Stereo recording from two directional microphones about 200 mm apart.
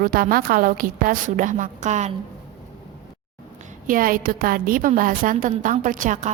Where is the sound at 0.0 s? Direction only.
45° right (ahead or behind).